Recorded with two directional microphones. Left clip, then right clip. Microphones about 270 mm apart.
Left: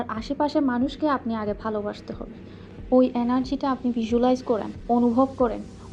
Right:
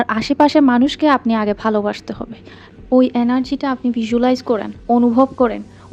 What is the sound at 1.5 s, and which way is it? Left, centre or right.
A woman's voice, right.